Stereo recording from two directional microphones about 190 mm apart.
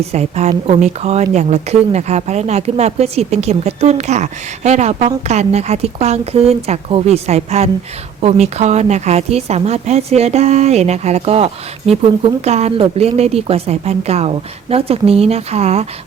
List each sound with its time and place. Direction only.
0.0 s a woman's voice: 35° right (ahead or behind)